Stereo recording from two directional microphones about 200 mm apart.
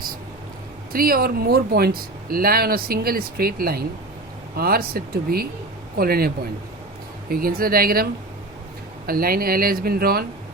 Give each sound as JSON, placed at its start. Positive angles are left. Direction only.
{"t": 0.9, "sound": "speech", "side_deg": -45}
{"t": 9.0, "sound": "speech", "side_deg": -45}